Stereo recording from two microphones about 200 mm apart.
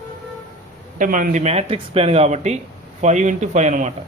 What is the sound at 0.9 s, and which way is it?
Speech, 40° right (ahead or behind).